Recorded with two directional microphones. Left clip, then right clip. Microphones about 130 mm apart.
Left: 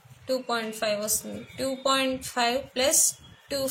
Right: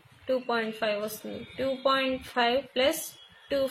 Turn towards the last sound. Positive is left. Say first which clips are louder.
# right 2 dB
turn(degrees=-55)  # may be behind; listen again after turning